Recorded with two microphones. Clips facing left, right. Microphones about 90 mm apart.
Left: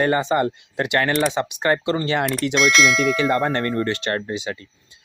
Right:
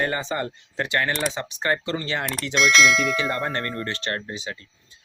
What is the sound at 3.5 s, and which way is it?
Speech, 25° left (ahead or behind).